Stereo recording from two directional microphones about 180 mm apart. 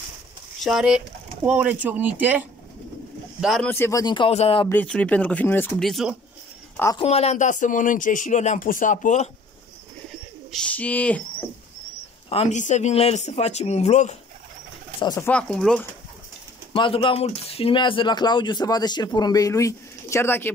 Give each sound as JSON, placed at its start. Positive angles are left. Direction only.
{"t": 0.7, "sound": "speech", "side_deg": -5}
{"t": 3.6, "sound": "speech", "side_deg": 15}
{"t": 4.0, "sound": "speech", "side_deg": 25}
{"t": 4.6, "sound": "speech", "side_deg": 10}
{"t": 7.0, "sound": "speech", "side_deg": 35}
{"t": 10.5, "sound": "speech", "side_deg": 5}
{"t": 12.3, "sound": "speech", "side_deg": 35}
{"t": 15.0, "sound": "speech", "side_deg": 25}
{"t": 15.2, "sound": "speech", "side_deg": 5}
{"t": 16.7, "sound": "speech", "side_deg": 30}